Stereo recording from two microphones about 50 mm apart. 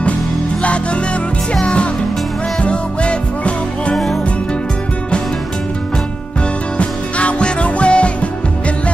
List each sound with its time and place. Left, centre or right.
1.5 s music: left
3.9 s music: centre
6.8 s music: left